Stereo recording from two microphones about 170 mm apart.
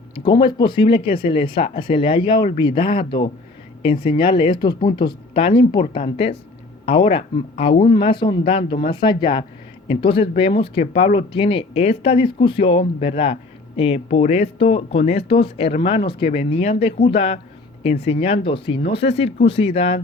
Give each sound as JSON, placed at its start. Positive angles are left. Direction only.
{"t": 0.3, "sound": "speech", "side_deg": 25}